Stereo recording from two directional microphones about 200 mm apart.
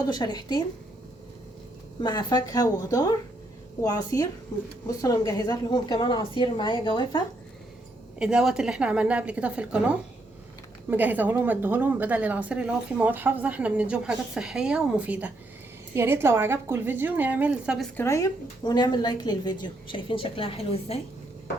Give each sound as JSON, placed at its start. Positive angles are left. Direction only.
{"t": 0.1, "sound": "a woman's voice", "side_deg": 20}
{"t": 2.0, "sound": "a woman's voice", "side_deg": 20}
{"t": 8.2, "sound": "a woman's voice", "side_deg": -5}
{"t": 17.9, "sound": "a woman's voice", "side_deg": 15}